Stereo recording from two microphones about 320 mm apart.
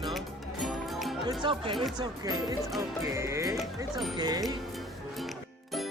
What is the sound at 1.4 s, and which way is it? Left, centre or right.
Speech, centre.